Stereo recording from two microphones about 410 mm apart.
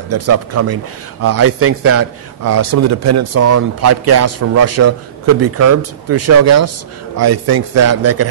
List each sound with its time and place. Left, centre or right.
0.1 s a man's voice: right